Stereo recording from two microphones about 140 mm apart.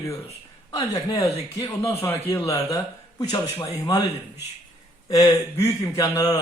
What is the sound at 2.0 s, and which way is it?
Speech, 15° left (ahead or behind).